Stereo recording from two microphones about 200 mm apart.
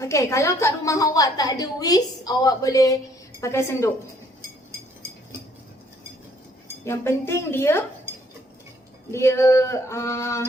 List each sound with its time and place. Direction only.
0.0 s a woman's voice: 15° left (ahead or behind)
6.8 s a woman's voice: 10° left (ahead or behind)
9.1 s a woman's voice: 15° left (ahead or behind)